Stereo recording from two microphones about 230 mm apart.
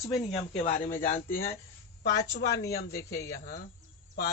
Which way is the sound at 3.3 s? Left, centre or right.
Left.